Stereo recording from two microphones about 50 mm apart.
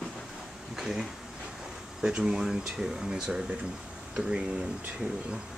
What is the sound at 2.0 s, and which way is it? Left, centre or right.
Speech, centre.